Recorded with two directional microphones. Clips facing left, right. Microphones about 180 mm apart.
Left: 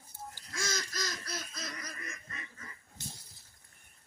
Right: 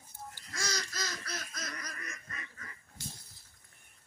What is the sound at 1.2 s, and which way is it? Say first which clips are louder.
Laughter: even; 15° left (ahead or behind).